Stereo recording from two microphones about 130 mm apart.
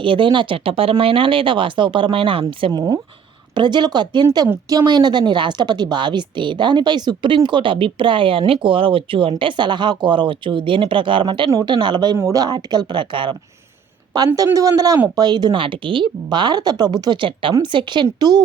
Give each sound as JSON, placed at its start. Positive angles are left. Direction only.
{"t": 0.0, "sound": "a woman's voice", "side_deg": -40}
{"t": 12.1, "sound": "a woman's voice", "side_deg": -25}
{"t": 14.3, "sound": "a man's voice", "side_deg": -25}